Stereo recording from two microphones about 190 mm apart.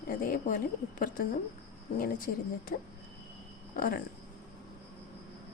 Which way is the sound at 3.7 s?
50° left (ahead or behind).